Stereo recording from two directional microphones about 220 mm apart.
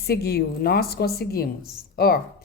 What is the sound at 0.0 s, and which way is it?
Speech, 45° left (ahead or behind).